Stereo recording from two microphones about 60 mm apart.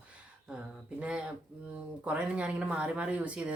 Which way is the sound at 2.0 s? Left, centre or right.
Right.